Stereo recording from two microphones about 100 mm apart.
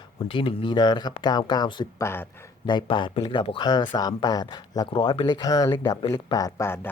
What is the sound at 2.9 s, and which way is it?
Speech, 55° left (ahead or behind).